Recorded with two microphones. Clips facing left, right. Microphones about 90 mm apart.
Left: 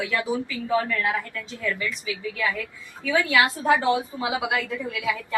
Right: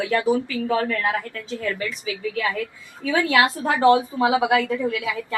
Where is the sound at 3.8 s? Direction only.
55° right (ahead or behind).